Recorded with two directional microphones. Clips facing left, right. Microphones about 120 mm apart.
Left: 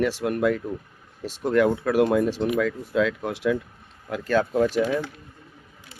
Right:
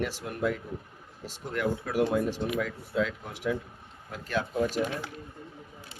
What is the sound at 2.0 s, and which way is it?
Speech, 70° left (ahead or behind).